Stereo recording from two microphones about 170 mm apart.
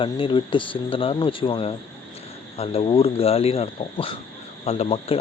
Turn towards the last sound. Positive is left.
turn(degrees=35)  # may be behind; listen again after turning